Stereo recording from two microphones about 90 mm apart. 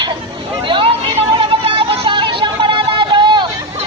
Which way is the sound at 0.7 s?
75° right (ahead or behind).